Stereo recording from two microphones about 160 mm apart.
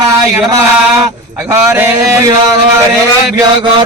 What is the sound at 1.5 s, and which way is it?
Speech, 15° right (ahead or behind).